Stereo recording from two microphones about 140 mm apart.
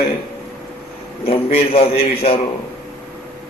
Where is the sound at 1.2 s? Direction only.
45° left (ahead or behind).